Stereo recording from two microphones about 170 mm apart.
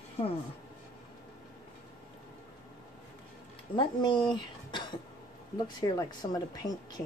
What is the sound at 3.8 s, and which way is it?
Speech, 30° left (ahead or behind).